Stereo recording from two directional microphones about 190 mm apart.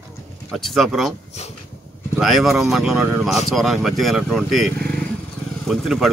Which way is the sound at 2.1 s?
Centre (ahead or behind).